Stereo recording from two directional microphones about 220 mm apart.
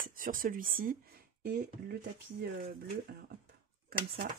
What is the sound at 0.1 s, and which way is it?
Speech, 40° right (ahead or behind).